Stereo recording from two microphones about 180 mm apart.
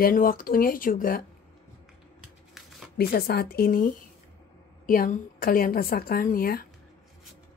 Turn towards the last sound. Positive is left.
turn(degrees=55)  # may be behind; listen again after turning